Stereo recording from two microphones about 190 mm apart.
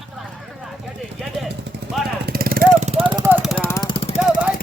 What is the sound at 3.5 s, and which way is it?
Vehicle, 10° left (ahead or behind).